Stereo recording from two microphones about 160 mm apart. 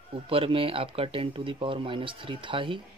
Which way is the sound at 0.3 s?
35° right (ahead or behind).